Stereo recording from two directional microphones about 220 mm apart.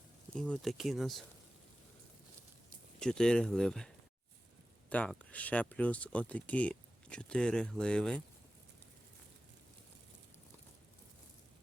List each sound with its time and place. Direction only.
0.3 s speech: 5° left (ahead or behind)
3.0 s speech: 5° left (ahead or behind)